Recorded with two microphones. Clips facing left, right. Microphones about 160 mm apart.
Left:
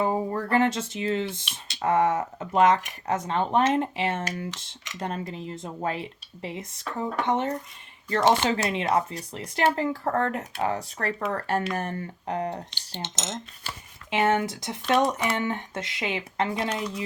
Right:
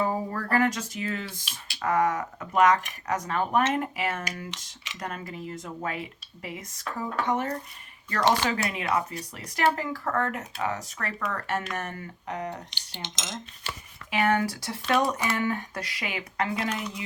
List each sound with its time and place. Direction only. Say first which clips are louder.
0.0 s speech: left 3 dB; 20° left (ahead or behind)
11.7 s cutlery: left 4 dB; 30° left (ahead or behind)
14.1 s speech: left 1 dB; 25° left (ahead or behind)